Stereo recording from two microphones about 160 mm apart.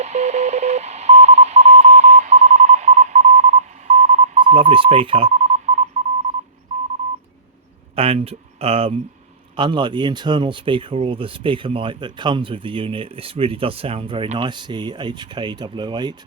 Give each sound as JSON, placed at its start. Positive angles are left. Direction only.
{"t": 0.0, "sound": "telephone dialing", "side_deg": -45}
{"t": 4.5, "sound": "speech", "side_deg": -35}
{"t": 6.7, "sound": "telephone dialing", "side_deg": -50}
{"t": 7.9, "sound": "speech", "side_deg": -35}